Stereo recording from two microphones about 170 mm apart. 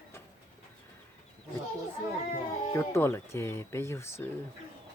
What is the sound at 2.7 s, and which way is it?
Speech, 15° left (ahead or behind).